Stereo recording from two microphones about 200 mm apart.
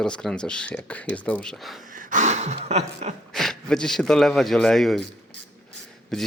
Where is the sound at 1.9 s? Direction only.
40° right (ahead or behind).